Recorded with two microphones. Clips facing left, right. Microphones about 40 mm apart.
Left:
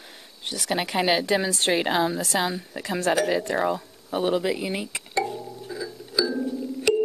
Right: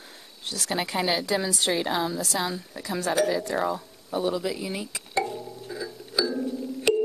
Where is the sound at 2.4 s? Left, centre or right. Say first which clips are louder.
Left 3 dB; left.